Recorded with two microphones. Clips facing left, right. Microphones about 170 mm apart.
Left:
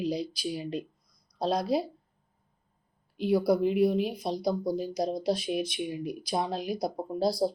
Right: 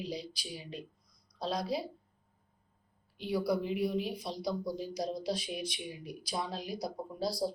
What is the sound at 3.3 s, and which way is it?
Speech, 60° left (ahead or behind).